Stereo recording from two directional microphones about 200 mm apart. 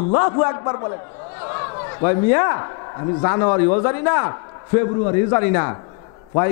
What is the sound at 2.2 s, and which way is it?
A man's voice, 15° left (ahead or behind).